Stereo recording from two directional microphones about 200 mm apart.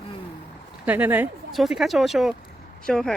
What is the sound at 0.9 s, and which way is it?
Speech, 10° right (ahead or behind).